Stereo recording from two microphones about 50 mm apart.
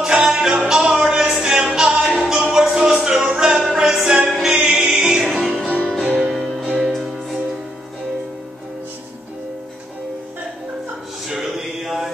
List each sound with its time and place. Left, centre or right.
0.0 s music: centre
2.0 s music: centre
6.3 s music: centre
11.2 s a sound: centre